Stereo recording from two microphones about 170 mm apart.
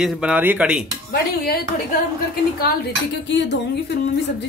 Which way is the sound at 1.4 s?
65° left (ahead or behind).